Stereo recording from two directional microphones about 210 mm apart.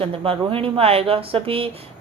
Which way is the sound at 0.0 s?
25° right (ahead or behind).